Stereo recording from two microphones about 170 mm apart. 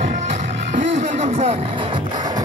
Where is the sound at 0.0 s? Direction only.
45° right (ahead or behind).